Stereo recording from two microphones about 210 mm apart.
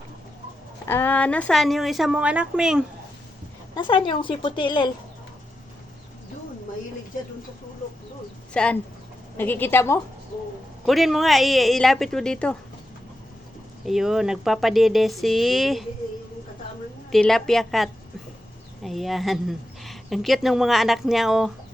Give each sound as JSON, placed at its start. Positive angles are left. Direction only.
{"t": 0.9, "sound": "speech", "side_deg": 10}
{"t": 3.8, "sound": "a woman's voice", "side_deg": 25}
{"t": 8.5, "sound": "a woman's voice", "side_deg": 5}
{"t": 10.8, "sound": "speech", "side_deg": 0}
{"t": 13.8, "sound": "speech", "side_deg": 0}
{"t": 17.1, "sound": "speech", "side_deg": 0}